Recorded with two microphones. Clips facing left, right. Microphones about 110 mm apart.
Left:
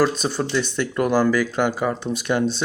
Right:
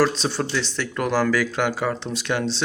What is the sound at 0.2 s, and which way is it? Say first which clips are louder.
Speech: left 2 dB; 10° left (ahead or behind).